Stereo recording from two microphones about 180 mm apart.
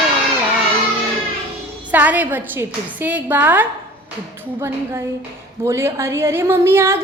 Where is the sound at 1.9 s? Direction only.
10° right (ahead or behind).